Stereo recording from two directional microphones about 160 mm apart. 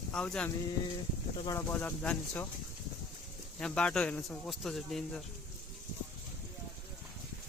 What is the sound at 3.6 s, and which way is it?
Speech, 5° left (ahead or behind).